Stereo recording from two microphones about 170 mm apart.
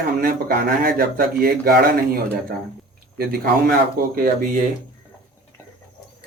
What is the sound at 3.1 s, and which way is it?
Speech, 60° right (ahead or behind).